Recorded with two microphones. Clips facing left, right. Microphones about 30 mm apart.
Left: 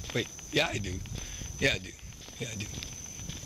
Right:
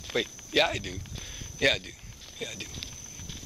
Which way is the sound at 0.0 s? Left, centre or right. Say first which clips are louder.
Right 3 dB; centre.